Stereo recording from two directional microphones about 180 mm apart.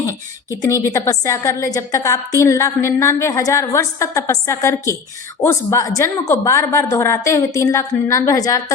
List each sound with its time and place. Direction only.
0.6 s a woman's voice: 15° left (ahead or behind)